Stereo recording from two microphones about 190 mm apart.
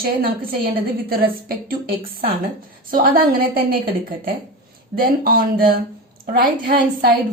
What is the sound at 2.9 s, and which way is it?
Speech, 50° right (ahead or behind).